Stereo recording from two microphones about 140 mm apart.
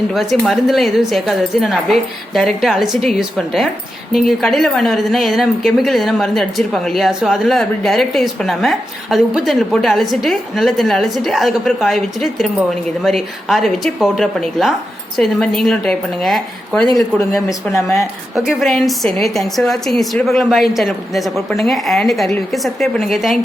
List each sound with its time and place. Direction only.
0.1 s a woman's voice: centre (ahead or behind)
17.7 s a woman's voice: 20° left (ahead or behind)
18.3 s a woman's voice: centre (ahead or behind)